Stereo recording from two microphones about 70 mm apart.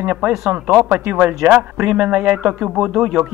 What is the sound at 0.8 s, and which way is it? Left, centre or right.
Speech, right.